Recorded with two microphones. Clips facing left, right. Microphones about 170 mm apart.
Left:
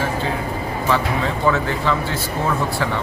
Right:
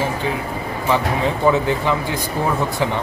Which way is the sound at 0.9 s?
20° right (ahead or behind).